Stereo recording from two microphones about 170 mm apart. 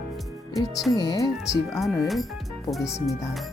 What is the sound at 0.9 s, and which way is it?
Speech, 25° left (ahead or behind).